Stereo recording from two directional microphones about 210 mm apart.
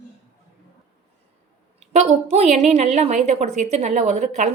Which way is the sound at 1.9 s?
30° right (ahead or behind).